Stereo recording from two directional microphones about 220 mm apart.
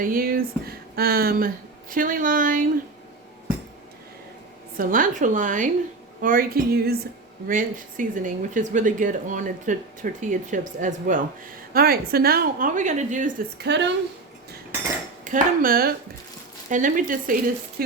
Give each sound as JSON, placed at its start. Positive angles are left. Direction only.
{"t": 0.0, "sound": "speech", "side_deg": -40}
{"t": 4.8, "sound": "speech", "side_deg": -40}
{"t": 6.2, "sound": "a sound", "side_deg": -40}
{"t": 7.4, "sound": "speech", "side_deg": -40}
{"t": 13.7, "sound": "a sound", "side_deg": -50}
{"t": 15.2, "sound": "speech", "side_deg": -35}
{"t": 17.8, "sound": "stir", "side_deg": -45}